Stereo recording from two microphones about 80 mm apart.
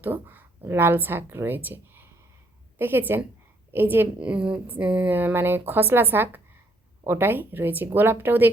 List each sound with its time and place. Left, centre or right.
0.0 s a woman's voice: right
4.2 s a woman's voice: centre